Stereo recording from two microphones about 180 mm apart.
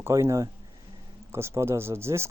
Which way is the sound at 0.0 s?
15° right (ahead or behind).